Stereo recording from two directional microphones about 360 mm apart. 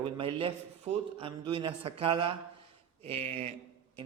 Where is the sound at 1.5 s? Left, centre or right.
Centre.